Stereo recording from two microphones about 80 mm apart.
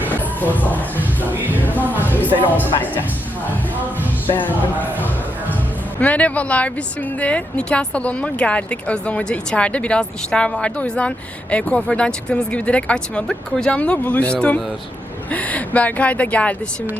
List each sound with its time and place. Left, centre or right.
0.5 s speech: left
1.3 s music: right
1.5 s music: left
1.8 s music: right
2.0 s music: left
2.7 s speech: left
4.4 s speech: left